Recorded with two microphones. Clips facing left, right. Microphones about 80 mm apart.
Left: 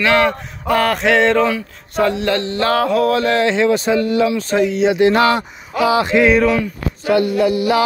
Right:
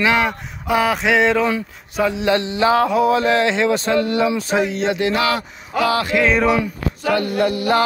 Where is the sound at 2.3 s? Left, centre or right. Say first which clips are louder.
Right 1 dB; centre.